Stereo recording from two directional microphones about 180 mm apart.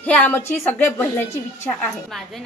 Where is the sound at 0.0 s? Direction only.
10° left (ahead or behind).